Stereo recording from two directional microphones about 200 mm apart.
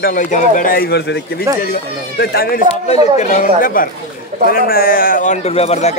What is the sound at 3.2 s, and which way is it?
A man's voice, 35° left (ahead or behind).